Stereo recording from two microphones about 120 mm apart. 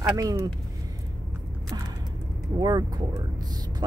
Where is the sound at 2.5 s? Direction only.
35° right (ahead or behind).